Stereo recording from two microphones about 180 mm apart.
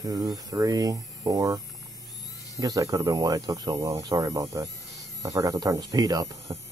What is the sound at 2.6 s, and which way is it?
Speech, 20° right (ahead or behind).